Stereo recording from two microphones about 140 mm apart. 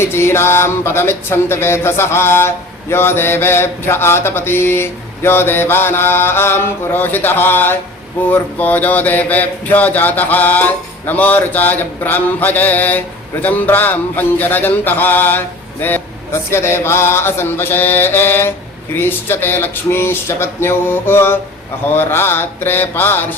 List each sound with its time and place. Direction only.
0.0 s mantra: 20° left (ahead or behind)